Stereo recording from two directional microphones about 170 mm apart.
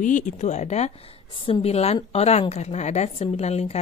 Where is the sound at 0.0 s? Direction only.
45° left (ahead or behind).